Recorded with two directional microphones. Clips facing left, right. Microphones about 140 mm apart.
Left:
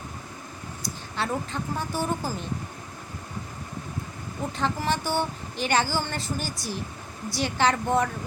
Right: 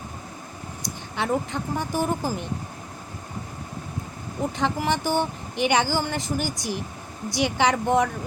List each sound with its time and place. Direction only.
1.1 s speech: 15° right (ahead or behind)
4.5 s speech: 15° right (ahead or behind)